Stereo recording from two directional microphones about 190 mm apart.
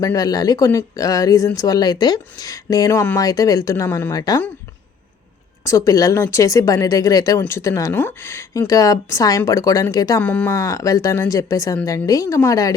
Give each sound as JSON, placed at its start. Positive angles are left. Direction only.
{"t": 0.0, "sound": "speech", "side_deg": 20}
{"t": 5.6, "sound": "speech", "side_deg": 15}